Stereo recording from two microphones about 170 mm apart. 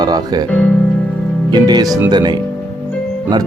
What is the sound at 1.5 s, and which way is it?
Speech, 25° right (ahead or behind).